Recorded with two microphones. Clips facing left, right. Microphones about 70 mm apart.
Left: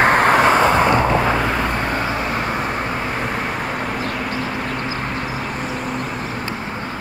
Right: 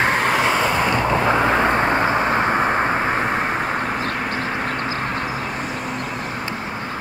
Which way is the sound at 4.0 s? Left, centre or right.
Right.